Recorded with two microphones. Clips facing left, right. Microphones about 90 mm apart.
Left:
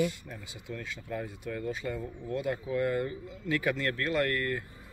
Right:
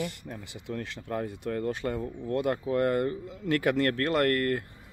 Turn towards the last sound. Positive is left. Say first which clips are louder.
# right 4 dB
turn(degrees=-55)  # may be behind; listen again after turning